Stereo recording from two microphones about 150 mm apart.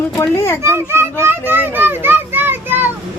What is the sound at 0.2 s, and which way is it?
Speech, 20° left (ahead or behind).